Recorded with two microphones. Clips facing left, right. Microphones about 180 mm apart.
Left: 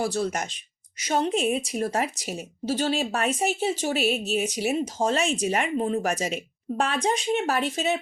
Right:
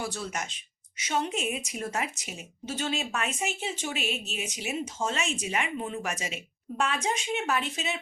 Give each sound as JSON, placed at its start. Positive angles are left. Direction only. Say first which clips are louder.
{"t": 0.0, "sound": "speech", "louder": "left 8 dB", "side_deg": 35}